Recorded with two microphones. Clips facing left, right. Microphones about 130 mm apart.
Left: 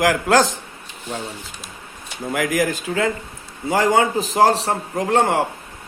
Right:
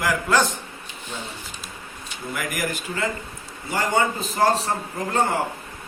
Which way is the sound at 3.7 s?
90° left.